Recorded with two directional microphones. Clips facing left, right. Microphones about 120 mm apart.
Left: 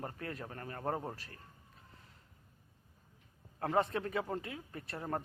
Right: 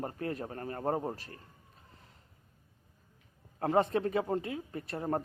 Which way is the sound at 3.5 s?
30° right (ahead or behind).